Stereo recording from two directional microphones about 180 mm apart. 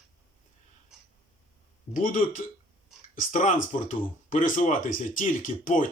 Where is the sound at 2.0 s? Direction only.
50° left (ahead or behind).